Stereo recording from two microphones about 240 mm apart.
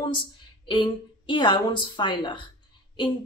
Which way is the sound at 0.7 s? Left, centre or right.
Centre.